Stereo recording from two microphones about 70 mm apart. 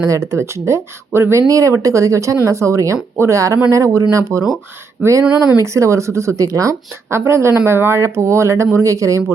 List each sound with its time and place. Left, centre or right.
0.0 s speech: right
5.5 s speech: right
7.1 s speech: right